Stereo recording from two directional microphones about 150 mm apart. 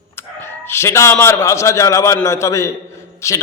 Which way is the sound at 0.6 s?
15° left (ahead or behind).